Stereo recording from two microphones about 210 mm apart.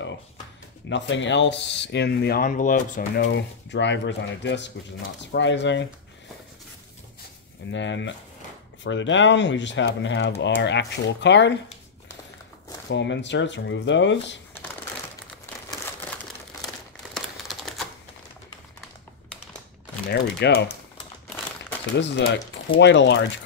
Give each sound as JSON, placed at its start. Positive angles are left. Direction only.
{"t": 0.8, "sound": "speech", "side_deg": 60}
{"t": 3.2, "sound": "speech", "side_deg": 55}
{"t": 7.7, "sound": "speech", "side_deg": 60}
{"t": 12.9, "sound": "speech", "side_deg": 55}
{"t": 17.1, "sound": "crumpling", "side_deg": 0}
{"t": 20.1, "sound": "speech", "side_deg": 50}
{"t": 22.0, "sound": "speech", "side_deg": 60}